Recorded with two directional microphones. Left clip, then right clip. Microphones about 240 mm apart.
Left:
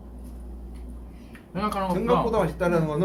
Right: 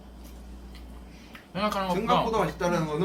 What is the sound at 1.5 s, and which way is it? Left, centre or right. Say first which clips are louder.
Speech: left 1 dB; centre.